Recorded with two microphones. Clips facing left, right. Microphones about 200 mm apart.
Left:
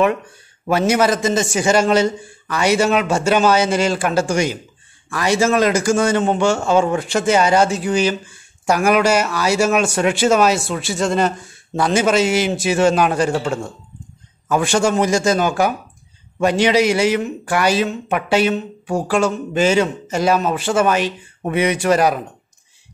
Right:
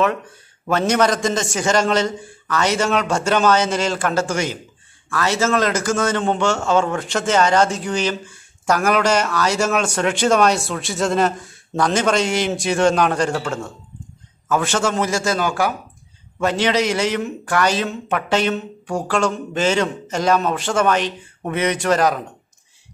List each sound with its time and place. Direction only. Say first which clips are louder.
0.7 s a man's voice: left 2 dB; 10° left (ahead or behind)